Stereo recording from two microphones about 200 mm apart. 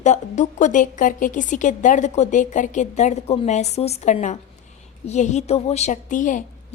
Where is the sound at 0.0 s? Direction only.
35° left (ahead or behind).